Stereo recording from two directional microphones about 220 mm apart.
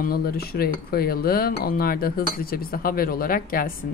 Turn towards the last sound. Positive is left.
turn(degrees=40)  # may be behind; listen again after turning